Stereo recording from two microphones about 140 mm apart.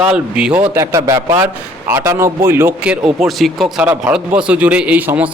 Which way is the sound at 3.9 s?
10° right (ahead or behind).